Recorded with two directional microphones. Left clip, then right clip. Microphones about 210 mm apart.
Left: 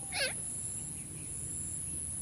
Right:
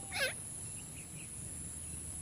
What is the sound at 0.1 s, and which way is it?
Turkey, 15° right (ahead or behind).